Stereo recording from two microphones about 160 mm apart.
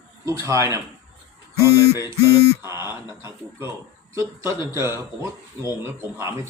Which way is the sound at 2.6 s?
15° right (ahead or behind).